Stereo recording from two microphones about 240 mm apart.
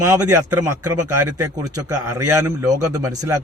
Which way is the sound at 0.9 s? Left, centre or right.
Right.